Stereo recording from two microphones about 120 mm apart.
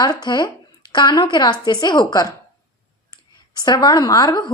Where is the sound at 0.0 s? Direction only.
35° left (ahead or behind).